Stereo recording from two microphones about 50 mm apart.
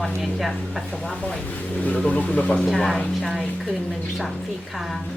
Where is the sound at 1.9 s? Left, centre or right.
Left.